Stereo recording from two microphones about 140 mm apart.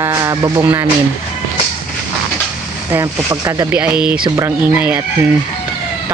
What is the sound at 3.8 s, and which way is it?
Speech, 10° right (ahead or behind).